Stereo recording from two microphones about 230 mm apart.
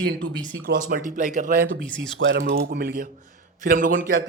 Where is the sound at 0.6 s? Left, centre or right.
Right.